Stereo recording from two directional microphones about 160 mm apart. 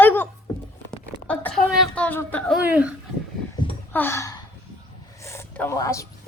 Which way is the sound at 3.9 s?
15° left (ahead or behind).